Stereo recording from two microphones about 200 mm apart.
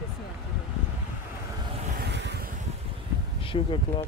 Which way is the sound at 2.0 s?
60° right (ahead or behind).